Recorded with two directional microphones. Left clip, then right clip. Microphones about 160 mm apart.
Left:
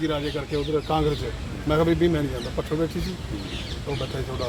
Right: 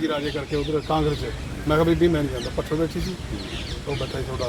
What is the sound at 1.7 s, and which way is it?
Speech, centre (ahead or behind).